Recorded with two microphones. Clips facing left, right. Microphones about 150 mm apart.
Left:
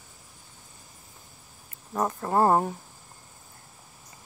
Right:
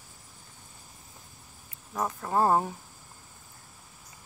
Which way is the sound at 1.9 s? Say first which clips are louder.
Left 4 dB; 15° left (ahead or behind).